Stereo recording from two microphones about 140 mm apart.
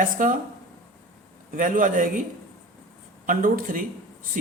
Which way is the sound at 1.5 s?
70° right (ahead or behind).